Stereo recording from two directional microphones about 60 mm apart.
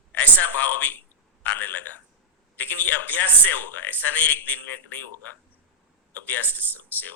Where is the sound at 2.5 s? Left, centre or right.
Left.